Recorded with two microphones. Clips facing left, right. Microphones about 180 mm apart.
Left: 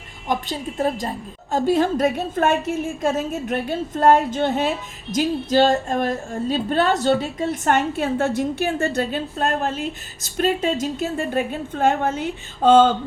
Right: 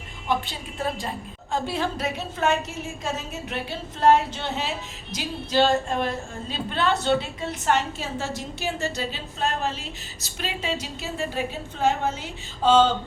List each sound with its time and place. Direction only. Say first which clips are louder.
0.3 s a woman's voice: left 3 dB; 40° left (ahead or behind)